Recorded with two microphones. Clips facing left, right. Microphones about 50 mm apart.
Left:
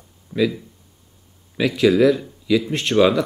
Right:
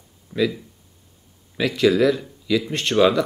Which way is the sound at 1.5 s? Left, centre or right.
Centre.